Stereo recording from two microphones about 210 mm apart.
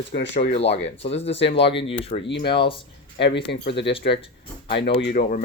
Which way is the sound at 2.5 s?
25° left (ahead or behind).